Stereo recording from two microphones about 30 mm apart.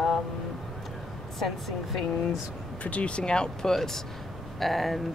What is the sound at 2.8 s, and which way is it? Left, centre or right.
Speech, left.